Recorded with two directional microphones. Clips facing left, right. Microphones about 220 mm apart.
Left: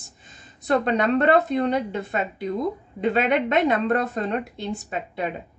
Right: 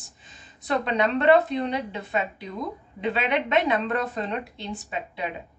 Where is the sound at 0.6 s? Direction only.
45° left (ahead or behind).